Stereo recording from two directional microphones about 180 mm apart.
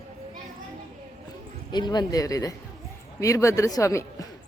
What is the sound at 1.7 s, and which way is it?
Speech, 25° left (ahead or behind).